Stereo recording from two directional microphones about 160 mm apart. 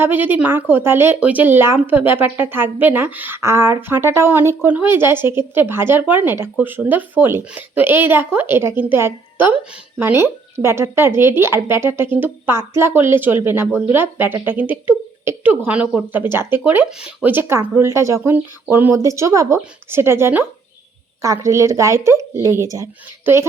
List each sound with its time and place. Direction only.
0.0 s speech: 10° right (ahead or behind)